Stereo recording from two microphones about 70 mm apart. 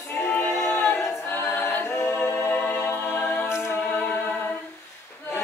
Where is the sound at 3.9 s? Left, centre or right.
Left.